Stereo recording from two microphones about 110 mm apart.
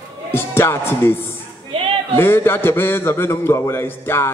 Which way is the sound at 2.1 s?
20° left (ahead or behind).